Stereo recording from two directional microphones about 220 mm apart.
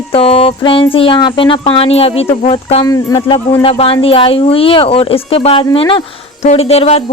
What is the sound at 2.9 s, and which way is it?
Speech, 15° left (ahead or behind).